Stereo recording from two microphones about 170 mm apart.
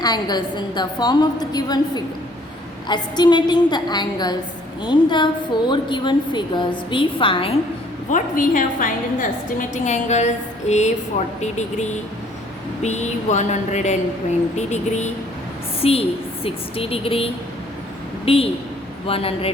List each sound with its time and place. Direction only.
0.0 s a woman's voice: 25° left (ahead or behind)
8.1 s a woman's voice: 50° left (ahead or behind); by 17.2 s 35° left (ahead or behind)
18.3 s a woman's voice: 35° left (ahead or behind)